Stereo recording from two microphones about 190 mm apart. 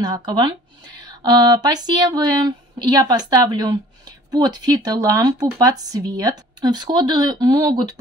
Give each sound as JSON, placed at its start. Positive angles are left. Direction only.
{"t": 0.0, "sound": "speech", "side_deg": -20}